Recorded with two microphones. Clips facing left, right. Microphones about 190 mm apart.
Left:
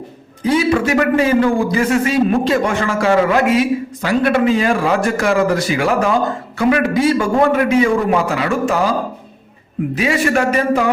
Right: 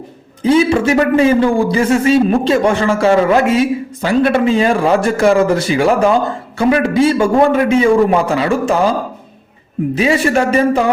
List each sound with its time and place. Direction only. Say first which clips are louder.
0.4 s speech: right 3 dB; 25° right (ahead or behind)
9.9 s speech: right 3 dB; 25° right (ahead or behind)